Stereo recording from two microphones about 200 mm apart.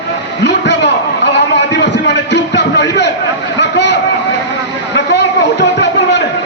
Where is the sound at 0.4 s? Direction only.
60° left (ahead or behind).